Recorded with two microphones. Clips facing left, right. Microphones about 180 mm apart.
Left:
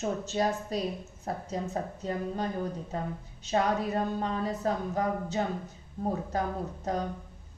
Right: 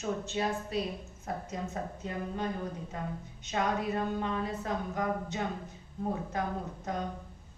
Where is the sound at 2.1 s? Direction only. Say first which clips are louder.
Left 3 dB; 35° left (ahead or behind).